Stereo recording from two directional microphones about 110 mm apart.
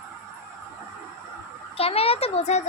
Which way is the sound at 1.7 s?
60° left (ahead or behind).